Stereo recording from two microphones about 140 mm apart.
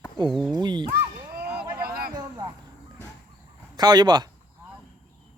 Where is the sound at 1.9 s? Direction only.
90° right.